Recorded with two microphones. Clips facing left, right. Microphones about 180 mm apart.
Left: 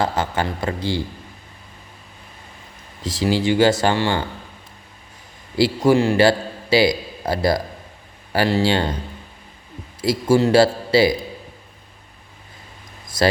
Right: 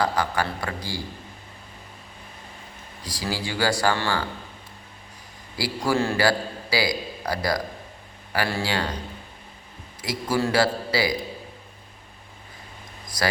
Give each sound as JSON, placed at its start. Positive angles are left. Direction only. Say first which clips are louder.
{"t": 0.0, "sound": "speech", "louder": "left 3 dB", "side_deg": 25}
{"t": 3.0, "sound": "speech", "louder": "left 10 dB", "side_deg": 25}
{"t": 5.5, "sound": "a man's voice", "louder": "left 8 dB", "side_deg": 25}
{"t": 10.0, "sound": "speech", "louder": "left 8 dB", "side_deg": 30}
{"t": 13.1, "sound": "speech", "louder": "left 8 dB", "side_deg": 25}